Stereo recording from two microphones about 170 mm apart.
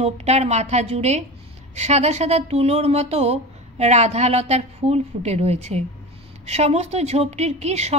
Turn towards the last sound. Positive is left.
turn(degrees=-40)  # may be behind; listen again after turning